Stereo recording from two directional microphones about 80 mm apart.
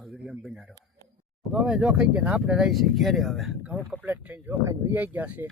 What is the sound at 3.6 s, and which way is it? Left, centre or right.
Speech, centre.